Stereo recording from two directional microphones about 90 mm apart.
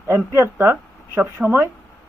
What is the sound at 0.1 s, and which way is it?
Speech, 25° right (ahead or behind).